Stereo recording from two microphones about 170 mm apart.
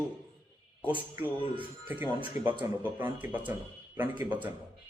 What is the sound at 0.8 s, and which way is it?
A man's voice, 10° right (ahead or behind).